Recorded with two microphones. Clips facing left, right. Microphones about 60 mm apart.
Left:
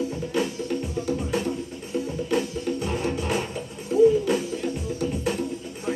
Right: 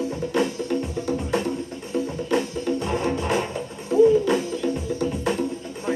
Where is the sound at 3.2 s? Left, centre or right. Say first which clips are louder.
Right 3 dB; right.